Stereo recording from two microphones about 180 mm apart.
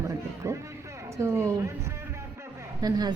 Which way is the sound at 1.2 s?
15° right (ahead or behind).